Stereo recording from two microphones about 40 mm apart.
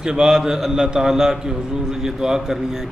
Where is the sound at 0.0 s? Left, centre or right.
Centre.